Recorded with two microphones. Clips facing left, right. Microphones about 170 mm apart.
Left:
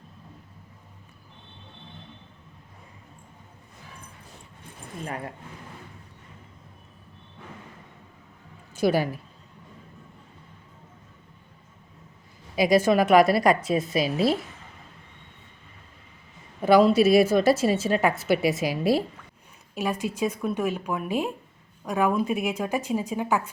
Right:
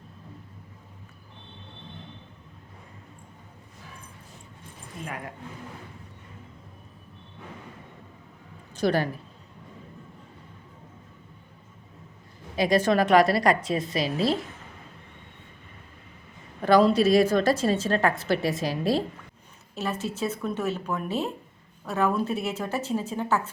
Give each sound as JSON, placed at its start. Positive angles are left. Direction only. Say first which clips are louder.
{"t": 5.0, "sound": "speech", "louder": "left 3 dB", "side_deg": 35}
{"t": 8.7, "sound": "speech", "louder": "left 2 dB", "side_deg": 10}
{"t": 12.5, "sound": "a woman's voice", "louder": "left 2 dB", "side_deg": 10}
{"t": 16.6, "sound": "a woman's voice", "louder": "left 2 dB", "side_deg": 10}